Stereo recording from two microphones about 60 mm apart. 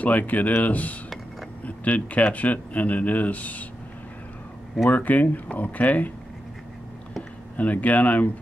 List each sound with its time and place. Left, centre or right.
0.0 s speech: left
4.8 s speech: left
7.5 s speech: left